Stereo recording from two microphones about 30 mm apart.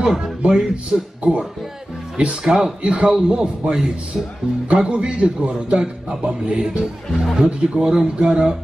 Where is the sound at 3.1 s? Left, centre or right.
Right.